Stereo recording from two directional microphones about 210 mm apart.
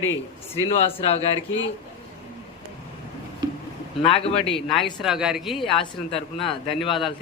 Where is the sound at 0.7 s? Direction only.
30° left (ahead or behind).